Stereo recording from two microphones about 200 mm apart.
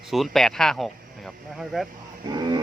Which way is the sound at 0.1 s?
Centre (ahead or behind).